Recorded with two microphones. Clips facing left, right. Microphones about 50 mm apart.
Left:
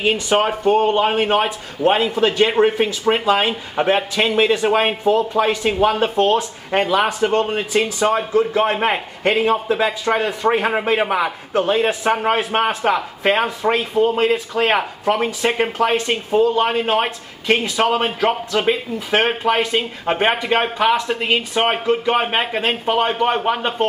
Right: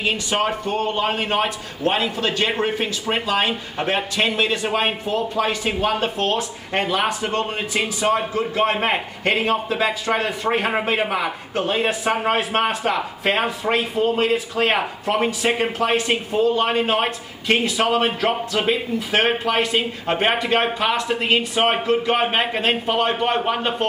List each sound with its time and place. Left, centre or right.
0.5 s a man's voice: centre
5.8 s a man's voice: centre